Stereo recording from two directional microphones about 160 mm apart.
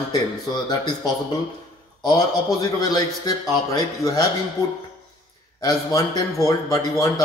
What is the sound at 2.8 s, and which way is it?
A man's voice, 25° left (ahead or behind).